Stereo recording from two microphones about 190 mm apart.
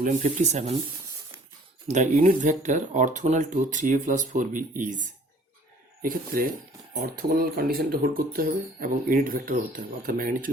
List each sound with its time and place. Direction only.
0.0 s speech: 45° right (ahead or behind)
1.9 s speech: 40° right (ahead or behind)